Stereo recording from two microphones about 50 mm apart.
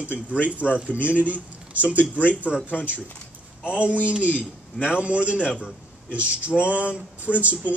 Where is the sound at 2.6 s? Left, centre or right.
Left.